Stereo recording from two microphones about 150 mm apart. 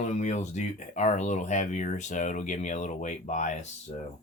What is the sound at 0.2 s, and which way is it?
Speech, 50° left (ahead or behind).